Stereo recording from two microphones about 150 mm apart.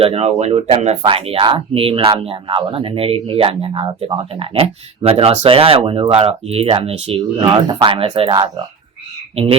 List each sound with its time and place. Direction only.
0.0 s speech: 40° right (ahead or behind)